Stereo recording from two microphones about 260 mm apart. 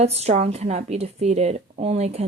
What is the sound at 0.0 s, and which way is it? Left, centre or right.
Speech, right.